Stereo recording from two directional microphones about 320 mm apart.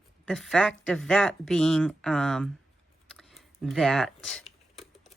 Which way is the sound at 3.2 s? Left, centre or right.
Centre.